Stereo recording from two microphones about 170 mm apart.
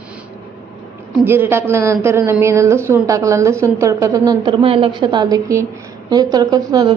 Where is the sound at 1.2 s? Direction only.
15° right (ahead or behind).